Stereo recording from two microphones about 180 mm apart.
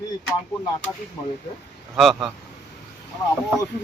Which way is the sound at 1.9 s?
Centre (ahead or behind).